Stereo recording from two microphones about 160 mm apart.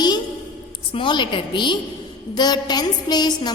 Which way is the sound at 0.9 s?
30° left (ahead or behind).